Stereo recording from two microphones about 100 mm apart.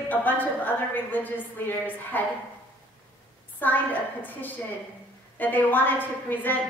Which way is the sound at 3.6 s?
20° left (ahead or behind).